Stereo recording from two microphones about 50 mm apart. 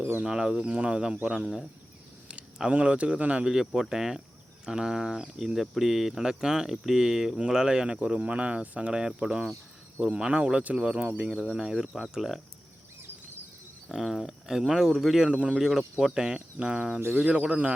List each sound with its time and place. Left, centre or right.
0.2 s speech: centre
2.6 s speech: right
3.4 s speech: centre
8.9 s speech: centre
13.9 s speech: centre
15.3 s speech: centre
15.5 s speech: centre; by 17.7 s right